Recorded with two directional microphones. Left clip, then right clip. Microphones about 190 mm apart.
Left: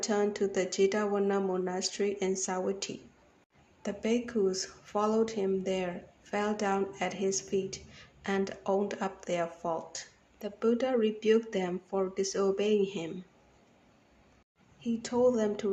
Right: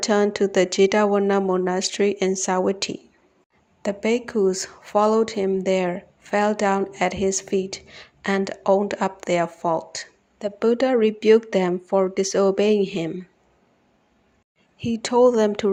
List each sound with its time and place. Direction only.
0.0 s speech: 45° right (ahead or behind)
14.8 s speech: 45° right (ahead or behind)